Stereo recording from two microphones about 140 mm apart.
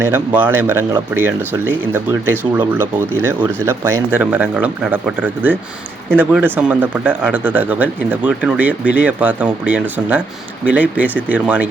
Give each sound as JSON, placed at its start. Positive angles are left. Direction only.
{"t": 0.0, "sound": "speech", "side_deg": -15}